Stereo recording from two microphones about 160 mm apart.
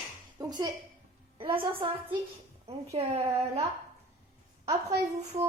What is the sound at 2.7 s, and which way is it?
Speech, 40° right (ahead or behind).